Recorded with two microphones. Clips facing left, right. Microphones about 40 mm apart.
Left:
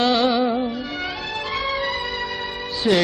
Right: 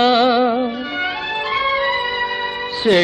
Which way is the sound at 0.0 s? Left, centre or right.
Right.